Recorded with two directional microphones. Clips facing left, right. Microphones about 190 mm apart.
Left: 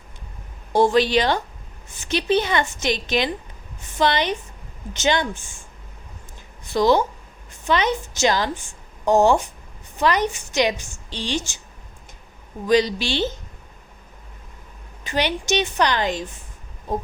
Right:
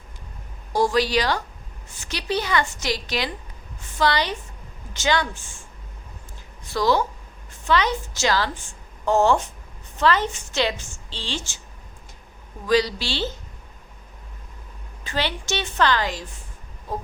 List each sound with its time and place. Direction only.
0.7 s a woman's voice: 25° left (ahead or behind)
6.7 s a woman's voice: 20° left (ahead or behind)
12.6 s a woman's voice: 20° left (ahead or behind)
15.0 s a woman's voice: 15° left (ahead or behind)